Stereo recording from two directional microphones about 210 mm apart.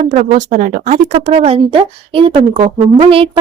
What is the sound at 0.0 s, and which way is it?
Speech, 35° right (ahead or behind).